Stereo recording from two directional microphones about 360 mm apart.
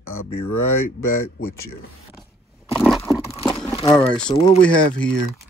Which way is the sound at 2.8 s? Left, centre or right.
Centre.